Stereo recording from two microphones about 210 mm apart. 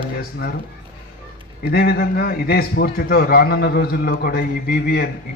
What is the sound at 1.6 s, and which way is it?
A man's voice, 50° left (ahead or behind).